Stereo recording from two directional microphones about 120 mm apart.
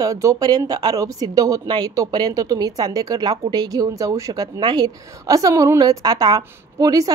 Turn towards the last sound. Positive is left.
turn(degrees=-30)  # may be behind; listen again after turning